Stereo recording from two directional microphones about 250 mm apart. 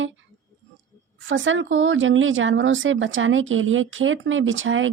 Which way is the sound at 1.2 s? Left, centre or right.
Right.